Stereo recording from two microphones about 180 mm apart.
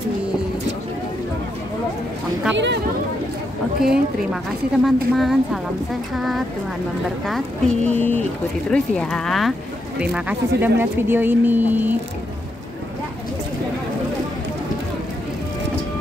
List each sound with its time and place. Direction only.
2.5 s speech: 75° right (ahead or behind)
3.8 s a woman's voice: 5° right (ahead or behind)
10.6 s speech: 10° right (ahead or behind)